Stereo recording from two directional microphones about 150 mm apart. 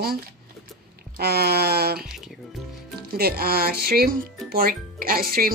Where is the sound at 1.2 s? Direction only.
90° right.